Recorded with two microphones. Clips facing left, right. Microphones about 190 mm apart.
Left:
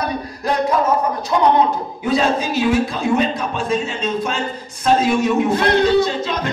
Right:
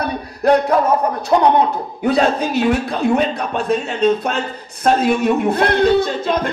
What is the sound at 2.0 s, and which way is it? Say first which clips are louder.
A man's voice: right 2 dB; 60° right (ahead or behind).